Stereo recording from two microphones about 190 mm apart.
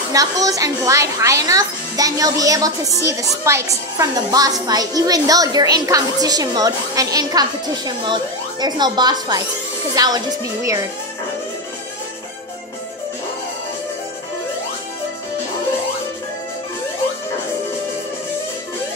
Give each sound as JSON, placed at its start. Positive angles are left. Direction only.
{"t": 0.1, "sound": "a woman's voice", "side_deg": -20}